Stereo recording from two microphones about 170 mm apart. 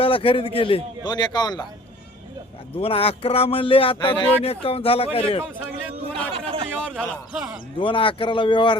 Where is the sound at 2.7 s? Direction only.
35° left (ahead or behind).